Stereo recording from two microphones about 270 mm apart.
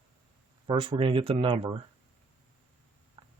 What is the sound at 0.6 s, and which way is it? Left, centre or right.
Speech, centre.